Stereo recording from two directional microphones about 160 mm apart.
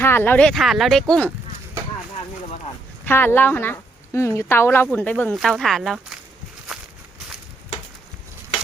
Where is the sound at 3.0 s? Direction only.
15° left (ahead or behind).